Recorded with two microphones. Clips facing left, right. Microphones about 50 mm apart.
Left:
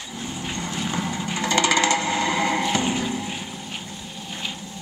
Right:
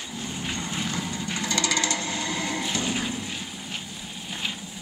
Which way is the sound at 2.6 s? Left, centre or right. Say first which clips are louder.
Left 6 dB; left.